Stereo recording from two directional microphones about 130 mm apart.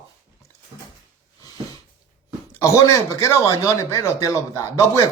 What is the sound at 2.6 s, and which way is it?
Speech, 25° left (ahead or behind).